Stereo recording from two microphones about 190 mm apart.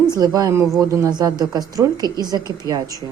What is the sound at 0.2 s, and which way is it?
Speech, 15° right (ahead or behind).